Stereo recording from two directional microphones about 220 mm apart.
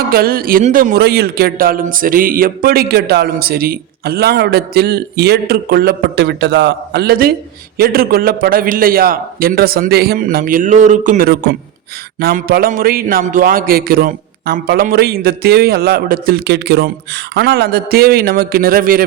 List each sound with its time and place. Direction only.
0.1 s a man's voice: 45° right (ahead or behind)